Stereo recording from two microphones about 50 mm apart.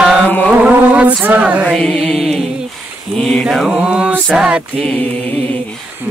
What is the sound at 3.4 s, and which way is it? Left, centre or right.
Mantra, centre.